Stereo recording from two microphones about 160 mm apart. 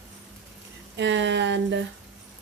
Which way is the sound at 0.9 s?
90° right.